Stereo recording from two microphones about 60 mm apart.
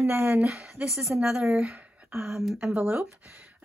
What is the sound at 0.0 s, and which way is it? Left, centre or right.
Speech, right.